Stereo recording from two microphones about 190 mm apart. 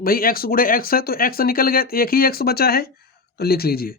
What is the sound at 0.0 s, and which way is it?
Speech, 50° left (ahead or behind).